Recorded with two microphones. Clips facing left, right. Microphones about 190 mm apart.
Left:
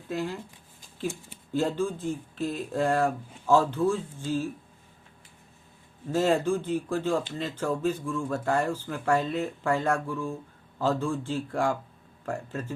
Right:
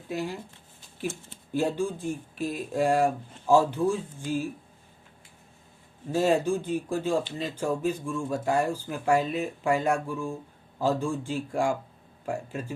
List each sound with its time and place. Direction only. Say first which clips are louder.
0.1 s speech: even; 15° right (ahead or behind)
1.5 s speech: even; 15° right (ahead or behind)
6.1 s speech: even; 15° right (ahead or behind)